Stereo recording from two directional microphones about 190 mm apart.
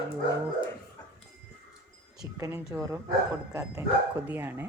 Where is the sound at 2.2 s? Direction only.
15° right (ahead or behind).